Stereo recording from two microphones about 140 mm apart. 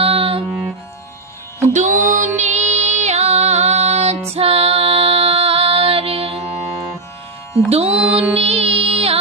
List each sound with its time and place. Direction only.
0.0 s music: 45° right (ahead or behind)
1.6 s music: 60° right (ahead or behind)
4.3 s female singing: 45° right (ahead or behind)
7.7 s music: 50° right (ahead or behind)